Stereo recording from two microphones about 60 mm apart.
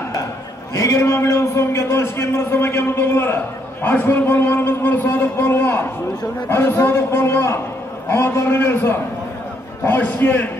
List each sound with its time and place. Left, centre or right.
0.7 s a man's voice: left